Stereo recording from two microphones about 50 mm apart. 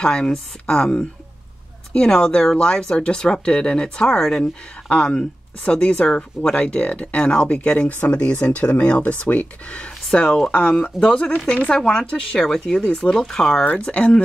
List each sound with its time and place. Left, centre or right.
0.0 s speech: centre
4.8 s speech: left
13.1 s speech: centre